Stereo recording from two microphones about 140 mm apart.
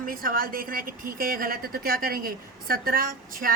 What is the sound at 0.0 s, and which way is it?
A woman's voice, 90° right.